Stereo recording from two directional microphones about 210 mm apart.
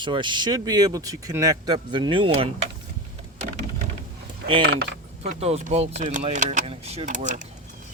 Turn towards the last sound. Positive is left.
turn(degrees=-35)  # may be behind; listen again after turning